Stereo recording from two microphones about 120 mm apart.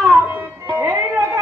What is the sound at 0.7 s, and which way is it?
Music, 15° right (ahead or behind).